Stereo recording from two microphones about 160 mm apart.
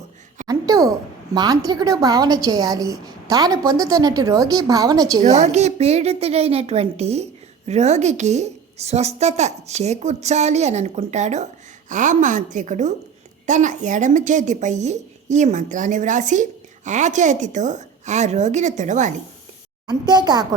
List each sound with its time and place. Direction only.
0.4 s a woman's voice: 25° right (ahead or behind)
5.2 s a woman's voice: 45° right (ahead or behind)
19.9 s a woman's voice: 25° right (ahead or behind)